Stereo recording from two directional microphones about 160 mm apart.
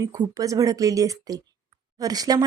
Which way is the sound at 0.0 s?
20° right (ahead or behind).